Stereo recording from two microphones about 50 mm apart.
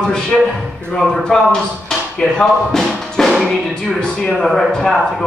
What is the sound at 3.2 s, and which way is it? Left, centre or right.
Music, centre.